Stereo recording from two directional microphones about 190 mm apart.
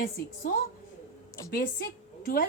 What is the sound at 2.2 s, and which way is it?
Speech, 50° left (ahead or behind).